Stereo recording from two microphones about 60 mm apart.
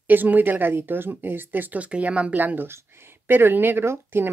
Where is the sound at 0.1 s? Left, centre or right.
Right.